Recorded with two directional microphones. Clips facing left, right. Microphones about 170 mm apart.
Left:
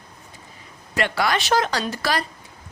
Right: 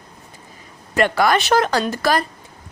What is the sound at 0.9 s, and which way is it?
Speech, 50° right (ahead or behind).